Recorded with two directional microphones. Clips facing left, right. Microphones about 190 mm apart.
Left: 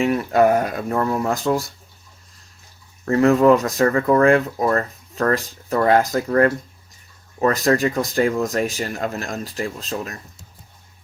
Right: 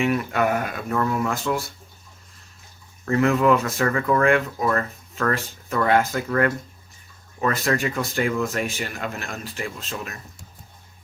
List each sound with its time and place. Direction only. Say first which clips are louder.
0.0 s speech: left 5 dB; 35° left (ahead or behind)
3.1 s speech: left 5 dB; 35° left (ahead or behind)